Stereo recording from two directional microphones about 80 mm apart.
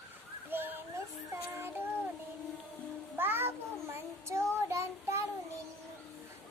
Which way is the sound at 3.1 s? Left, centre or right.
Right.